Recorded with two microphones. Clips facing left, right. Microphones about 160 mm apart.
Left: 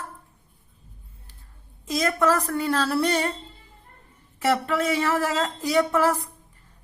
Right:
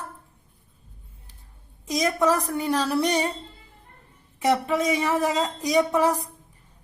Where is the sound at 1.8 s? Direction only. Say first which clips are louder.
Even; 15° right (ahead or behind).